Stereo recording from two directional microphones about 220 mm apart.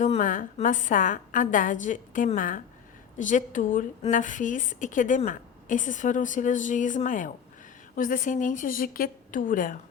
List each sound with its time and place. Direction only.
0.0 s a woman's voice: 35° left (ahead or behind)